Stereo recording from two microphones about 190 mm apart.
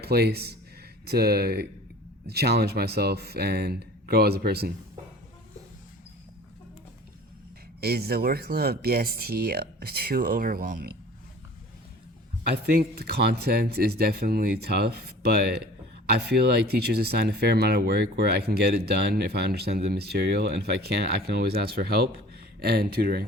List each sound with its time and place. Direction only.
0.0 s speech: 55° right (ahead or behind)
7.8 s speech: 55° right (ahead or behind)
13.0 s speech: 60° right (ahead or behind)